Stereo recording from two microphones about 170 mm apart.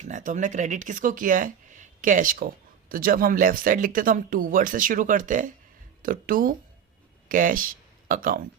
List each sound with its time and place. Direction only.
0.0 s speech: 50° right (ahead or behind)